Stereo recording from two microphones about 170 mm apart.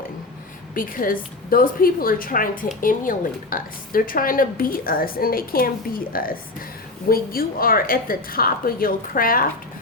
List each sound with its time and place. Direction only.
0.7 s a woman's voice: 55° left (ahead or behind)